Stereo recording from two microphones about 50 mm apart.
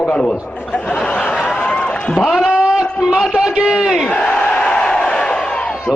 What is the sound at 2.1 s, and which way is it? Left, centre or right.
Speech, left.